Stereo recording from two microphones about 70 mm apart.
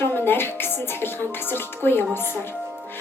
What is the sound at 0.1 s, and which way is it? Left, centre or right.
Music, left.